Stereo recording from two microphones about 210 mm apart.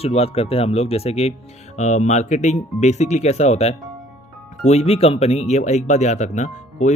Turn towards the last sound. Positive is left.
turn(degrees=35)  # may be behind; listen again after turning